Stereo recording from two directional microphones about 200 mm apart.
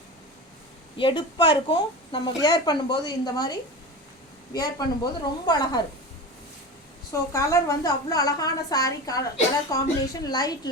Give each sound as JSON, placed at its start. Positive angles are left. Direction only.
{"t": 0.9, "sound": "speech", "side_deg": 25}
{"t": 7.1, "sound": "a woman's voice", "side_deg": 15}